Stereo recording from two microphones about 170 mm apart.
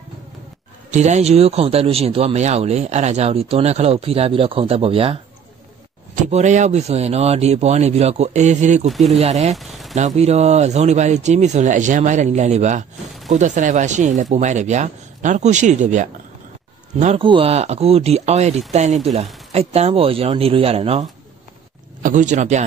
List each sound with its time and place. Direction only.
0.9 s a man's voice: 40° right (ahead or behind)
6.1 s a man's voice: 45° right (ahead or behind)
9.6 s a sound: centre (ahead or behind)
9.9 s speech: 40° right (ahead or behind)
17.2 s a man's voice: 30° right (ahead or behind)
22.0 s speech: 45° right (ahead or behind)